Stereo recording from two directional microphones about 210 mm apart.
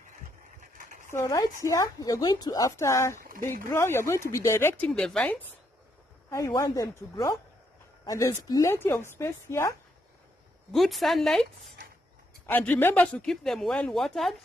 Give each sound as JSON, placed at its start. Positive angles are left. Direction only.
{"t": 0.6, "sound": "bird", "side_deg": -40}
{"t": 1.1, "sound": "speech", "side_deg": 15}
{"t": 3.2, "sound": "speech", "side_deg": -40}
{"t": 3.6, "sound": "speech", "side_deg": 10}
{"t": 10.7, "sound": "speech", "side_deg": 0}
{"t": 12.4, "sound": "speech", "side_deg": 10}